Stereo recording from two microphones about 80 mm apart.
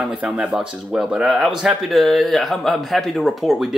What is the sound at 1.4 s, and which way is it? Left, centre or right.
A man's voice, centre.